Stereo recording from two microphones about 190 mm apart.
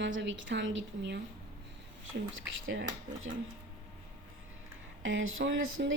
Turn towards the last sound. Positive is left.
turn(degrees=-85)